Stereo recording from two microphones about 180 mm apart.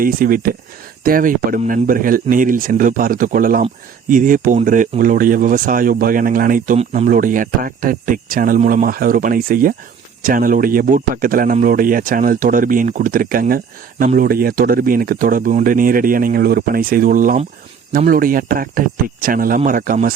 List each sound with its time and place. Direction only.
0.0 s speech: 50° right (ahead or behind)